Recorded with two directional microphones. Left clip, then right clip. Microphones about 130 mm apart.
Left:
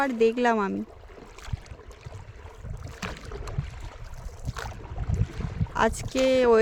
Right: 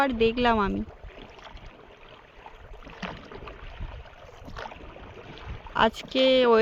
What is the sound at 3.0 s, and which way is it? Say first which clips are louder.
Boat: left 1 dB; 75° left (ahead or behind).